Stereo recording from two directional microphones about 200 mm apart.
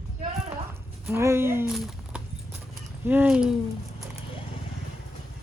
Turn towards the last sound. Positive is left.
turn(degrees=-5)  # may be behind; listen again after turning